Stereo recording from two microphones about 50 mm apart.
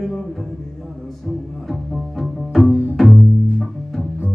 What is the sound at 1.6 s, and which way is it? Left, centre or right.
Music, centre.